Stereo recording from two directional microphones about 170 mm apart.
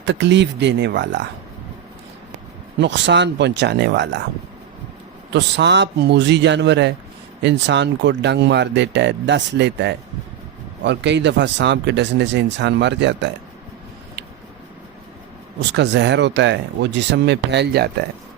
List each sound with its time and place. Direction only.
0.0 s speech: 90° right
2.8 s speech: 90° right
5.3 s speech: 90° right
15.7 s speech: 90° right; by 17.9 s 70° right (ahead or behind)